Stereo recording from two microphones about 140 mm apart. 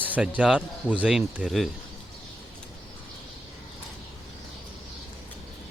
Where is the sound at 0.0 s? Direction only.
10° right (ahead or behind).